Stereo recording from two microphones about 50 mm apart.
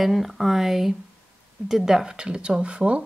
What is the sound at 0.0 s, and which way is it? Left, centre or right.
Speech, centre.